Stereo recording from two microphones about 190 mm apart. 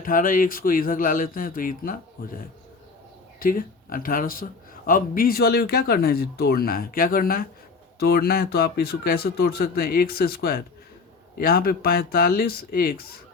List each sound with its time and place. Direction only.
0.0 s speech: 45° left (ahead or behind)
3.4 s speech: 50° left (ahead or behind)